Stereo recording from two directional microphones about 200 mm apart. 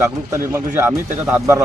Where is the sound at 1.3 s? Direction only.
15° right (ahead or behind).